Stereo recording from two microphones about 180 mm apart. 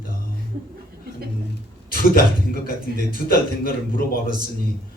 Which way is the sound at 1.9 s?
55° left (ahead or behind).